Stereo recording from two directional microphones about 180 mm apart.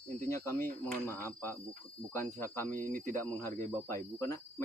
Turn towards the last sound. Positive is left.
turn(degrees=15)  # may be behind; listen again after turning